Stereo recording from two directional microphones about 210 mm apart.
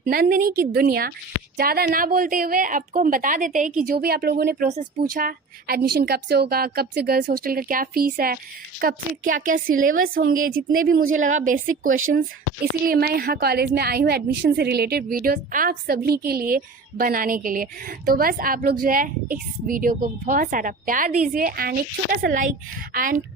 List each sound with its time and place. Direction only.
0.0 s a woman's voice: 45° right (ahead or behind)
4.7 s a woman's voice: 35° right (ahead or behind)